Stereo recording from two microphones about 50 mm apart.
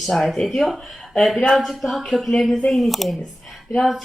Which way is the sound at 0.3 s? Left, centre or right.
Centre.